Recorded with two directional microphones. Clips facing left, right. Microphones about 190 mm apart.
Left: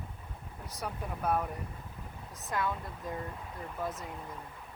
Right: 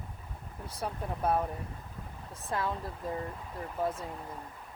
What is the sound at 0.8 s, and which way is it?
Speech, 30° right (ahead or behind).